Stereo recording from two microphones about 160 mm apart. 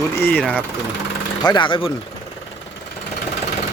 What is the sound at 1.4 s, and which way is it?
Speech, 30° left (ahead or behind).